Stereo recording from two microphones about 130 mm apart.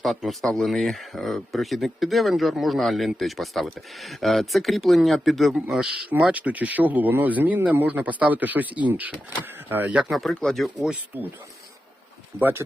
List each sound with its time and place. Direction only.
0.0 s speech: centre (ahead or behind)
10.0 s speech: centre (ahead or behind)
12.4 s speech: 15° right (ahead or behind)